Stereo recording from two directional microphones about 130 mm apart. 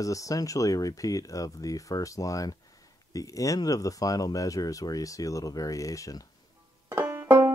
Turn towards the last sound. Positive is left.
turn(degrees=-15)  # may be behind; listen again after turning